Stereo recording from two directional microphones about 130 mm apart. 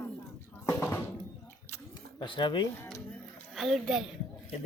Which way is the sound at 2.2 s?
40° left (ahead or behind).